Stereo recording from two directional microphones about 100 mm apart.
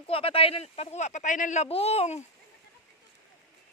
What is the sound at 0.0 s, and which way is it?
Speech, 70° left (ahead or behind).